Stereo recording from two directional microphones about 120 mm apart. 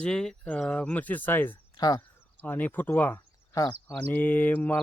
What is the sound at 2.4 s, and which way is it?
Speech, 15° left (ahead or behind).